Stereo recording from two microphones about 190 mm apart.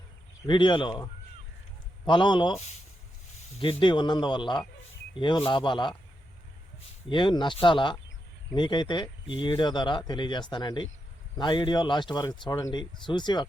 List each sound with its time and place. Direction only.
0.4 s speech: 25° left (ahead or behind)
2.0 s speech: 25° left (ahead or behind)
3.6 s speech: 25° left (ahead or behind)
7.1 s speech: 25° left (ahead or behind)